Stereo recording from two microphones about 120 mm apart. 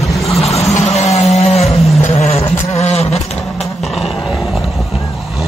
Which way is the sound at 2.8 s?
65° left (ahead or behind).